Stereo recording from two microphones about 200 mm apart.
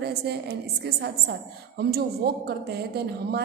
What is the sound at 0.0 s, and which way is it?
A woman's voice, 55° right (ahead or behind).